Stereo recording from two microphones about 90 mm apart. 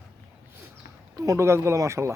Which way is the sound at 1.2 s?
35° right (ahead or behind).